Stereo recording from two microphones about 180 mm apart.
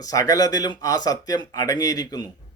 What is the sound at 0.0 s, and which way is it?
Speech, 20° left (ahead or behind).